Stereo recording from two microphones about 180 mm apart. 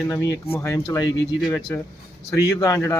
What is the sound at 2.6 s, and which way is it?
Speech, 20° left (ahead or behind).